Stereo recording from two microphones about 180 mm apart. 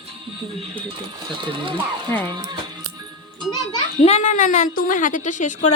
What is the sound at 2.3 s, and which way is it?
Speech, 25° right (ahead or behind).